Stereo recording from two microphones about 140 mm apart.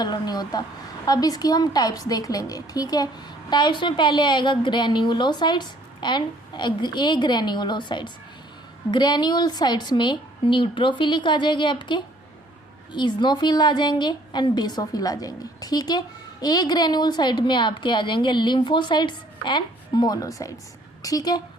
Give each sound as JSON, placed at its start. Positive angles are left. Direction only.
{"t": 0.0, "sound": "a woman's voice", "side_deg": 30}